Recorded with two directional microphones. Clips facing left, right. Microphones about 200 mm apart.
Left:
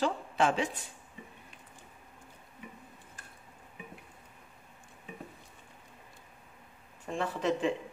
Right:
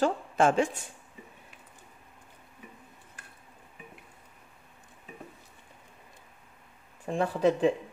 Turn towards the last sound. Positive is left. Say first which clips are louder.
# right 6 dB
turn(degrees=-35)  # may be behind; listen again after turning